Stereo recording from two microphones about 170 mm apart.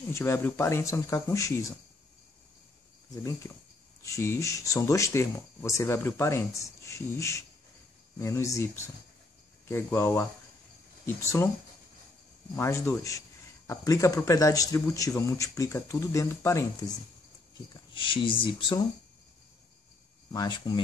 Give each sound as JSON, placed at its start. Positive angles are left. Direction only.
{"t": 0.1, "sound": "speech", "side_deg": 15}
{"t": 3.2, "sound": "speech", "side_deg": 20}
{"t": 9.7, "sound": "speech", "side_deg": 15}
{"t": 12.5, "sound": "speech", "side_deg": 15}
{"t": 17.9, "sound": "speech", "side_deg": 30}
{"t": 20.2, "sound": "speech", "side_deg": 25}